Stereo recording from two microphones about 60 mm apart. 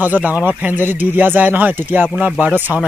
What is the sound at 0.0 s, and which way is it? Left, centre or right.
Speech, right.